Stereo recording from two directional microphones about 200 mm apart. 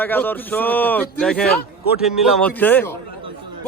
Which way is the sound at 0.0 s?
10° left (ahead or behind).